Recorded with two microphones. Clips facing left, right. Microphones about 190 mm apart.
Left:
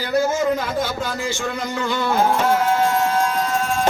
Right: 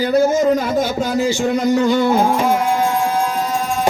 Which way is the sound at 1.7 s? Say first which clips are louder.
Right 8 dB; 45° right (ahead or behind).